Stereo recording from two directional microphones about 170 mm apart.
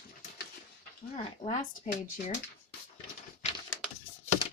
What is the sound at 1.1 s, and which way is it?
Speech, 35° left (ahead or behind).